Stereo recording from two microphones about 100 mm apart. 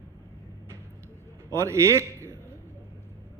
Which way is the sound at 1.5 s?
30° right (ahead or behind).